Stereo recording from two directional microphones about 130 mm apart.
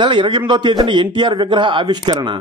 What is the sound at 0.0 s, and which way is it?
A man's voice, 35° right (ahead or behind).